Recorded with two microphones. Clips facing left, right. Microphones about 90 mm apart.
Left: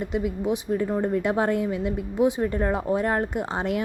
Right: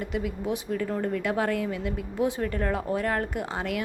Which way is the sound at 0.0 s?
25° left (ahead or behind).